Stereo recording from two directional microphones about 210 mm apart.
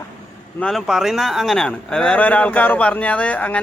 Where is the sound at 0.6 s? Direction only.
Centre (ahead or behind).